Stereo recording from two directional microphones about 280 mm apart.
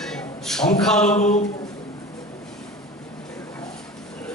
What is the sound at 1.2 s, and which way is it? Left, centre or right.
Speech, left.